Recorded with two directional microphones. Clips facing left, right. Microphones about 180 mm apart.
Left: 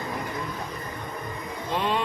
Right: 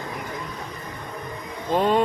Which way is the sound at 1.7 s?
45° right (ahead or behind).